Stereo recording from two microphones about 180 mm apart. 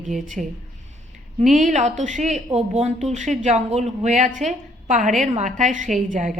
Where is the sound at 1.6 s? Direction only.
45° right (ahead or behind).